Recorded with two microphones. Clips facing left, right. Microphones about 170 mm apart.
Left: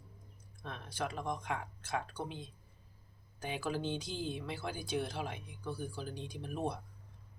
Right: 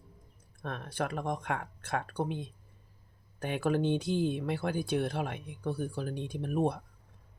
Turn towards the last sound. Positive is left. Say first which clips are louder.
# right 8 dB
turn(degrees=-55)  # may be behind; listen again after turning